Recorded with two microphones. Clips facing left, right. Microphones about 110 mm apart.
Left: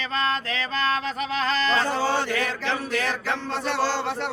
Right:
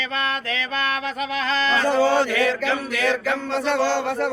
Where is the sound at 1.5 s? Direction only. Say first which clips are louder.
Right 3 dB; 35° left (ahead or behind).